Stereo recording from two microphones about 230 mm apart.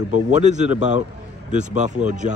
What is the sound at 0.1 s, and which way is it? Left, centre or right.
A man's voice, right.